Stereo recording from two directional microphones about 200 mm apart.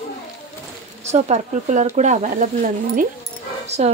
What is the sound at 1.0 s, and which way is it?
Speech, 35° right (ahead or behind).